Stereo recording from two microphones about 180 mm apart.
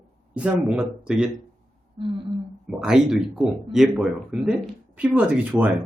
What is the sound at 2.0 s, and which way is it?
Speech, 25° right (ahead or behind).